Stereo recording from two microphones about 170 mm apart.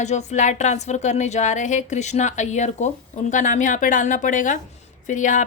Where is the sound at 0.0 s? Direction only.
40° left (ahead or behind).